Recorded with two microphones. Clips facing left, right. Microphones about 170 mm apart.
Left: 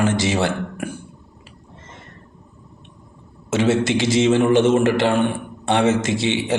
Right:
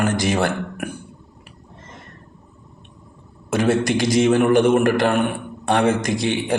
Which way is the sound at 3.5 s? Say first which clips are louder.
Even; 25° left (ahead or behind).